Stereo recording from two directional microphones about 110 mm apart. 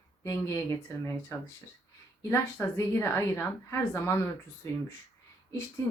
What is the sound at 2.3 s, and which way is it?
A woman's voice, 25° left (ahead or behind).